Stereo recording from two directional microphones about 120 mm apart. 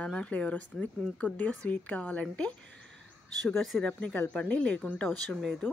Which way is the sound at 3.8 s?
10° left (ahead or behind).